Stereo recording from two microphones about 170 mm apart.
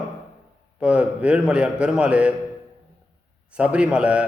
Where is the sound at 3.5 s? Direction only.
5° right (ahead or behind).